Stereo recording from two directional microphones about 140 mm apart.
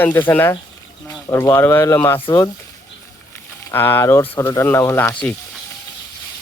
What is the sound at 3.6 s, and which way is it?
Speech, 15° left (ahead or behind).